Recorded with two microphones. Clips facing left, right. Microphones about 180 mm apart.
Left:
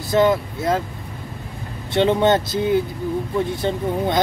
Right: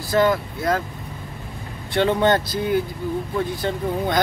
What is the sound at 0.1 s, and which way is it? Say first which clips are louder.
Speech: left 2 dB; 20° left (ahead or behind).